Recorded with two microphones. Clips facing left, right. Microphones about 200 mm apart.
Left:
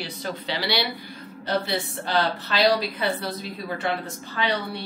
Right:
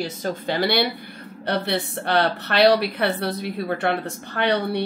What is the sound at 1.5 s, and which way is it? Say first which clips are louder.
A woman's voice: right 2 dB; 65° right (ahead or behind).